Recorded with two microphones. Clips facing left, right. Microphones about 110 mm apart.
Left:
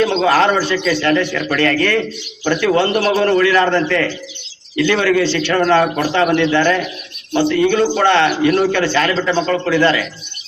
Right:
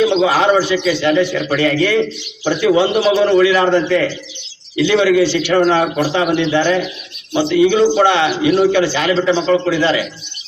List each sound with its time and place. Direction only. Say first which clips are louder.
0.0 s a man's voice: right 1 dB; 10° right (ahead or behind)